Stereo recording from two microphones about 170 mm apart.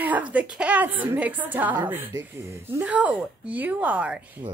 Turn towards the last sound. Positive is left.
turn(degrees=-5)  # may be behind; listen again after turning